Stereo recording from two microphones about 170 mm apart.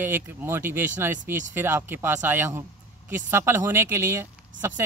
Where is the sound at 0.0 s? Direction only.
10° right (ahead or behind).